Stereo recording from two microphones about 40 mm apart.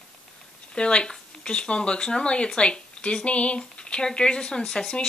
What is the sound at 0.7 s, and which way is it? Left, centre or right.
Speech, left.